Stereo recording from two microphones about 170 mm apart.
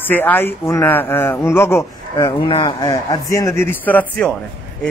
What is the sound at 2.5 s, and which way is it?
A man's voice, 25° left (ahead or behind).